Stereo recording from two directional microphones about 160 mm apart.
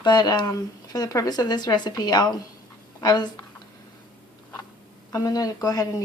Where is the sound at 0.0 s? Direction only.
25° left (ahead or behind).